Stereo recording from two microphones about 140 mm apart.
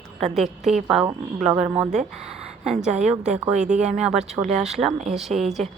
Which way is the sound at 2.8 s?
55° right (ahead or behind).